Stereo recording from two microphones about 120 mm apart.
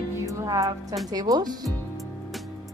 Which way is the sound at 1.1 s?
35° right (ahead or behind).